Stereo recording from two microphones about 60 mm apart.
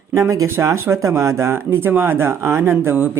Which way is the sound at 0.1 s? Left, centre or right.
Right.